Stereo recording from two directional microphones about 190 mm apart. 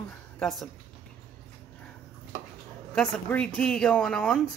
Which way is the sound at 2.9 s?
5° left (ahead or behind).